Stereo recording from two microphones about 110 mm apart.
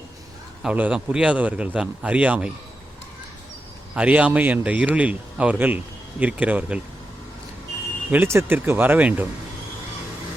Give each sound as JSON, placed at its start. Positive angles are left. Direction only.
{"t": 0.6, "sound": "a man's voice", "side_deg": -10}
{"t": 3.9, "sound": "a man's voice", "side_deg": -10}
{"t": 8.1, "sound": "a man's voice", "side_deg": -20}